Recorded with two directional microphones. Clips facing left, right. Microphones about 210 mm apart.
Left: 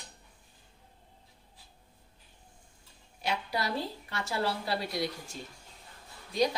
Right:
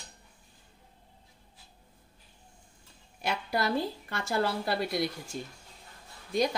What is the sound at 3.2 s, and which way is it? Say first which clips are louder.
A woman's voice: right 3 dB; 50° right (ahead or behind).